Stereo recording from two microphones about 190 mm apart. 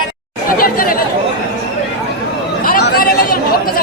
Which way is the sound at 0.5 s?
50° left (ahead or behind).